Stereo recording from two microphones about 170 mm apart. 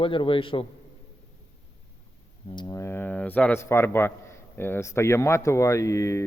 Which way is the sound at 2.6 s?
20° left (ahead or behind).